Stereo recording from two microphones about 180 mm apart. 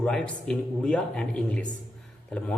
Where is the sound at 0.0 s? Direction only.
5° left (ahead or behind).